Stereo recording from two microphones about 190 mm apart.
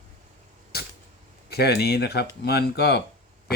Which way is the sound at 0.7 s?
55° left (ahead or behind).